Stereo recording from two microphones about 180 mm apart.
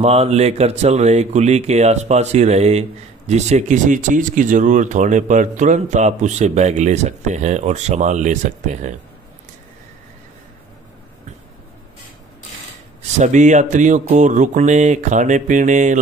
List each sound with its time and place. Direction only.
0.0 s speech: 35° right (ahead or behind)
13.2 s speech: 40° right (ahead or behind)